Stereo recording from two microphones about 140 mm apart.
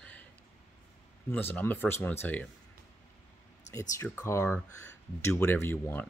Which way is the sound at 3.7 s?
20° left (ahead or behind).